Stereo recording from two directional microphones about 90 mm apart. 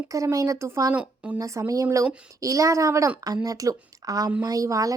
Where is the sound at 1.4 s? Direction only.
35° right (ahead or behind).